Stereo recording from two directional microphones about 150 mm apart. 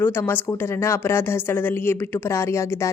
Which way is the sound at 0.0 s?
15° left (ahead or behind).